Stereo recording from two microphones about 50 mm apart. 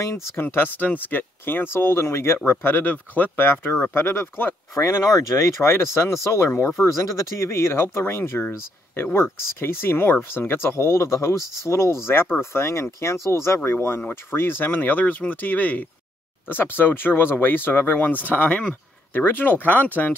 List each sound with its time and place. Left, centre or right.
0.4 s speech: left
2.5 s speech: left
3.6 s speech: left
4.7 s speech: left
6.8 s speech: left
13.7 s speech: left
16.4 s speech: left